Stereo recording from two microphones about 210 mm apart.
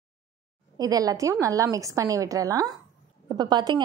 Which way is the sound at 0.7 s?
15° right (ahead or behind).